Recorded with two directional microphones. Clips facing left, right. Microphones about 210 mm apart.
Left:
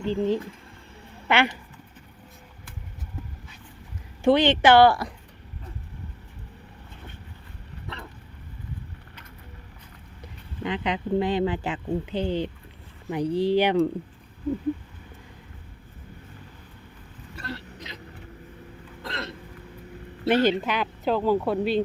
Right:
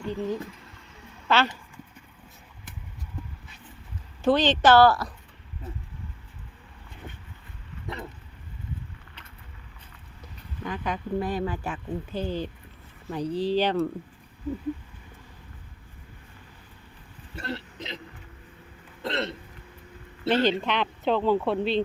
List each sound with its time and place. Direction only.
0.0 s speech: 25° left (ahead or behind)
1.3 s speech: 15° left (ahead or behind)
4.2 s speech: 10° left (ahead or behind)
10.6 s speech: 20° left (ahead or behind)
17.3 s hiccup: 25° right (ahead or behind)
19.0 s hiccup: 25° right (ahead or behind)
20.2 s speech: 15° left (ahead or behind)